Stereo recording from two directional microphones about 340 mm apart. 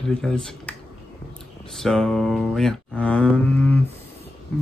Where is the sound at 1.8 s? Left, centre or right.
Centre.